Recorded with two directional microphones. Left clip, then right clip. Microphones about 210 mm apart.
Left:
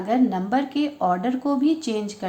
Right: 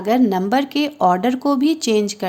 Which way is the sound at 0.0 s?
55° right (ahead or behind).